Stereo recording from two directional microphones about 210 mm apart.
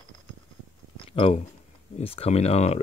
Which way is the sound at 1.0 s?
30° left (ahead or behind).